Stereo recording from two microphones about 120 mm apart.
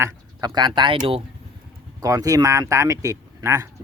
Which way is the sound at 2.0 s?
30° right (ahead or behind).